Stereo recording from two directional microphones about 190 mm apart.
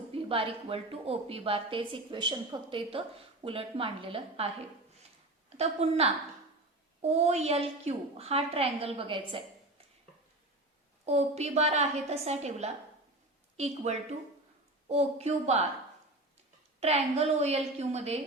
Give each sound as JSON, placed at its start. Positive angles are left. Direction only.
{"t": 0.1, "sound": "a woman's voice", "side_deg": -30}
{"t": 5.5, "sound": "a woman's voice", "side_deg": -35}
{"t": 11.0, "sound": "a woman's voice", "side_deg": -35}
{"t": 16.8, "sound": "a woman's voice", "side_deg": -35}